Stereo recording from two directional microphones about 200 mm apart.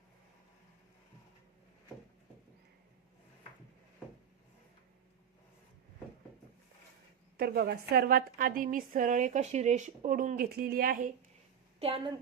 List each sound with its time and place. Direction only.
7.3 s a woman's voice: 50° right (ahead or behind)
11.8 s a woman's voice: 30° right (ahead or behind)